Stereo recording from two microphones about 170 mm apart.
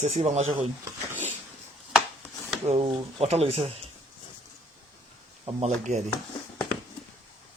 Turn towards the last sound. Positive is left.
turn(degrees=-45)  # may be behind; listen again after turning